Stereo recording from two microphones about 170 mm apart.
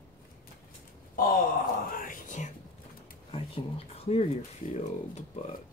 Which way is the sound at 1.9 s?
50° left (ahead or behind).